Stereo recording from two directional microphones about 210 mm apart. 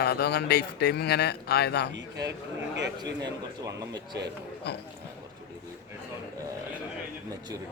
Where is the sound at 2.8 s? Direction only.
55° right (ahead or behind).